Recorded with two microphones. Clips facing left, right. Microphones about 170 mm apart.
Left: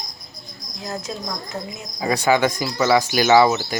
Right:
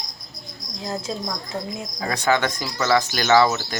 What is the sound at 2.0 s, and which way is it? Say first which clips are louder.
Speech: left 4 dB; 10° left (ahead or behind).